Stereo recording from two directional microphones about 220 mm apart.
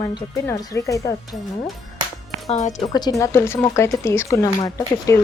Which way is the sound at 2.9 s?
15° left (ahead or behind).